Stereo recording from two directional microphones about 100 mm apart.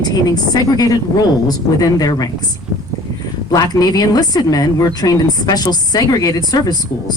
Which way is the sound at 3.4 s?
40° left (ahead or behind).